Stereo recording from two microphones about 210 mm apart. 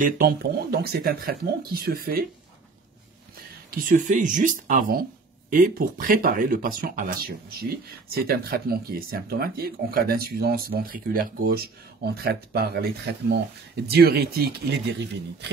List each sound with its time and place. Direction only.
0.0 s speech: 45° right (ahead or behind)
3.7 s speech: 35° right (ahead or behind)